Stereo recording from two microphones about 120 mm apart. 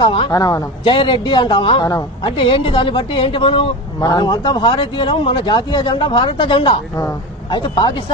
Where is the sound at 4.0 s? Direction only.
35° left (ahead or behind).